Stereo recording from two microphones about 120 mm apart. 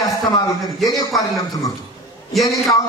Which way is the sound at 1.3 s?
30° left (ahead or behind).